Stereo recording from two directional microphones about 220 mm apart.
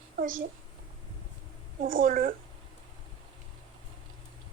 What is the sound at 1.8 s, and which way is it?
Speech, 40° right (ahead or behind).